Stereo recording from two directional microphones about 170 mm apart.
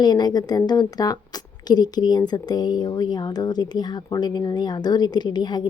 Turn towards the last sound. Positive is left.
turn(degrees=25)  # may be behind; listen again after turning